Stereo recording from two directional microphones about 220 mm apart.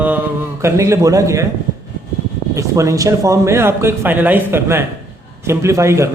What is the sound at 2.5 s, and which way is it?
Speech, 15° right (ahead or behind).